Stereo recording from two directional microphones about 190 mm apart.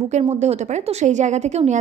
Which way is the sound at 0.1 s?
35° right (ahead or behind).